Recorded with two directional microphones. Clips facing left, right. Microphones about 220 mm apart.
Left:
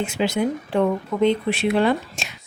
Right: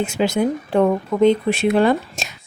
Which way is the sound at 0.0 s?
45° right (ahead or behind).